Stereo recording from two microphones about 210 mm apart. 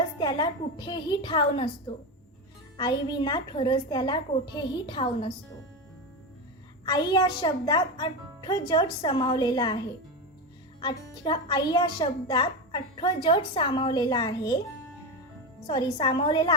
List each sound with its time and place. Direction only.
0.2 s a child's voice: 20° left (ahead or behind)
2.7 s a child's voice: 20° left (ahead or behind)
6.8 s a child's voice: 20° left (ahead or behind)
10.8 s a child's voice: 20° left (ahead or behind)
15.6 s a child's voice: 20° left (ahead or behind)